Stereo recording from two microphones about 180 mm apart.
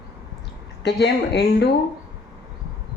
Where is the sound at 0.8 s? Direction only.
70° left (ahead or behind).